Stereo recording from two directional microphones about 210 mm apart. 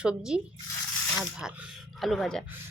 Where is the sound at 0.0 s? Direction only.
5° right (ahead or behind).